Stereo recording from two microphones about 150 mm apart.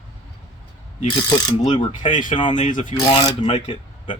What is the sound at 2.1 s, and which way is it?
Speech, 60° left (ahead or behind).